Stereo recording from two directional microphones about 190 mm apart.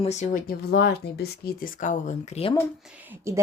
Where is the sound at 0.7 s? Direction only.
60° left (ahead or behind); by 2.6 s 30° left (ahead or behind).